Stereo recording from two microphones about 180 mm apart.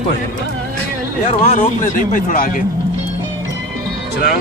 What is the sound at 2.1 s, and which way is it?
Speech, 45° left (ahead or behind).